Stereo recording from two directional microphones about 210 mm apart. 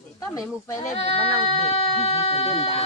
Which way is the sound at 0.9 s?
30° left (ahead or behind).